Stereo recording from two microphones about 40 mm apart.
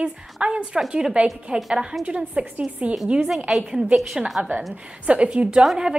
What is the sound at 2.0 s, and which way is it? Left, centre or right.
Speech, right.